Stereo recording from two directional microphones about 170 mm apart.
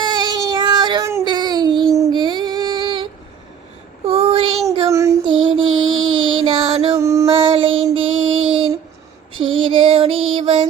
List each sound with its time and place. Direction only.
0.0 s a sound: 25° right (ahead or behind)
2.0 s female singing: 25° right (ahead or behind)
4.0 s child singing: 30° right (ahead or behind)
4.9 s child singing: 15° right (ahead or behind)
5.2 s music: 30° right (ahead or behind)
6.9 s music: 15° right (ahead or behind)
7.5 s child singing: 30° right (ahead or behind)
7.9 s a sound: 30° right (ahead or behind)
9.3 s female singing: 30° right (ahead or behind)